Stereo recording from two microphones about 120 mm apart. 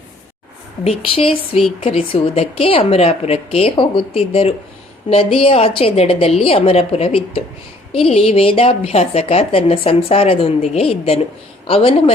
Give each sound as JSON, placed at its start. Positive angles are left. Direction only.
{"t": 0.9, "sound": "a woman's voice", "side_deg": 50}